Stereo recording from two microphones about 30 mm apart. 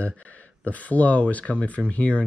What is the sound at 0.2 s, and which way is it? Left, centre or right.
Speech, left.